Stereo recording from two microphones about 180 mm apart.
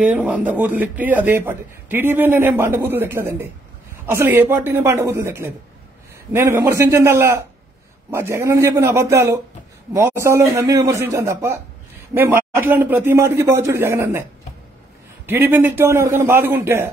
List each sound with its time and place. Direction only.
0.1 s speech: 10° right (ahead or behind)
15.2 s speech: 10° right (ahead or behind)